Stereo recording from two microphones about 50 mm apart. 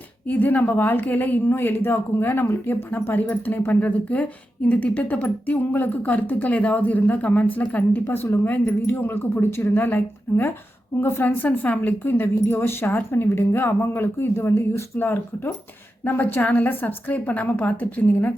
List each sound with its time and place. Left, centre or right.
0.3 s speech: left
8.9 s a woman's voice: left
14.9 s a woman's voice: left
16.4 s speech: left